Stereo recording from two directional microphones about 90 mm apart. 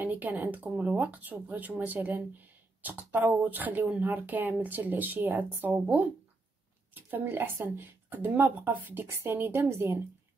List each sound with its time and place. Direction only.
0.0 s speech: 20° right (ahead or behind)